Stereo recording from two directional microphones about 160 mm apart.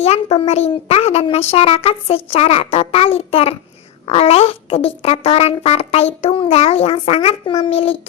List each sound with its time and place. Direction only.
0.0 s a woman's voice: 40° left (ahead or behind)